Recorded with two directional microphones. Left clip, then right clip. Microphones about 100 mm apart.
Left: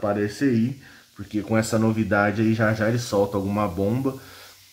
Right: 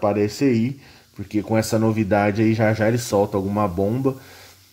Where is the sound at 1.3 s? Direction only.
30° right (ahead or behind).